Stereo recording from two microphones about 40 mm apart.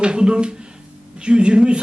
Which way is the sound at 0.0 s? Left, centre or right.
Right.